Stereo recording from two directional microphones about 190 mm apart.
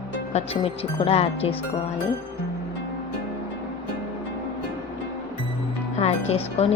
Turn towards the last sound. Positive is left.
turn(degrees=35)  # may be behind; listen again after turning